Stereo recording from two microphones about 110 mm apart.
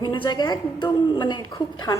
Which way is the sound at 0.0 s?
45° left (ahead or behind).